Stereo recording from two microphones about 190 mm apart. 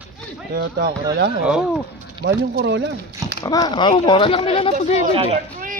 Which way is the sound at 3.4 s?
20° left (ahead or behind).